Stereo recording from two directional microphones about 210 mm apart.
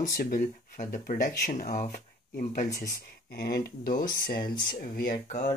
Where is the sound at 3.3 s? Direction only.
50° left (ahead or behind).